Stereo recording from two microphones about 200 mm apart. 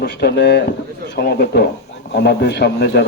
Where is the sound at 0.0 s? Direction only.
55° left (ahead or behind).